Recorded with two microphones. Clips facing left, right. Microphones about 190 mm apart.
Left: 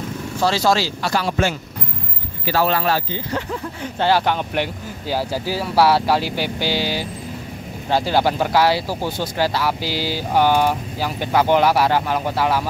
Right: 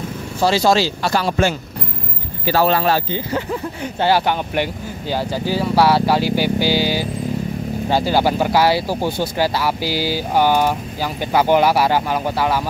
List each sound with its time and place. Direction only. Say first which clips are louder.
0.4 s speech: right 3 dB; 15° right (ahead or behind)
4.0 s speech: right 1 dB; 5° right (ahead or behind)
5.1 s speech: right 2 dB; 5° left (ahead or behind)